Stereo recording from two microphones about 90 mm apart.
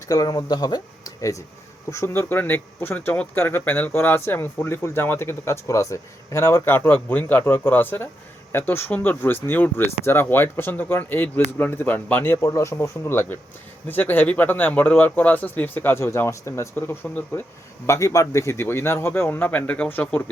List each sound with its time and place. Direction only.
0.1 s speech: 45° left (ahead or behind); by 20.2 s 20° left (ahead or behind)